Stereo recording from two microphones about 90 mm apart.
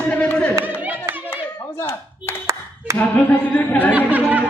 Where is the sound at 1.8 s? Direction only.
25° left (ahead or behind).